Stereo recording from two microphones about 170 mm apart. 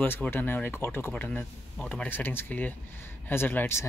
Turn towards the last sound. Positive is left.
turn(degrees=15)  # may be behind; listen again after turning